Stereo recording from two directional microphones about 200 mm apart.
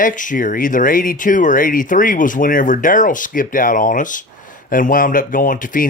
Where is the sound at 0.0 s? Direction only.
40° left (ahead or behind).